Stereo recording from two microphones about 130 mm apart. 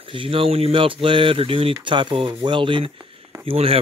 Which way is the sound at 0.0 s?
40° right (ahead or behind).